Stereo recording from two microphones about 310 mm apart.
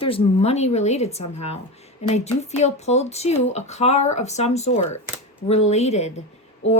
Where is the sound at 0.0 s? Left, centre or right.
Centre.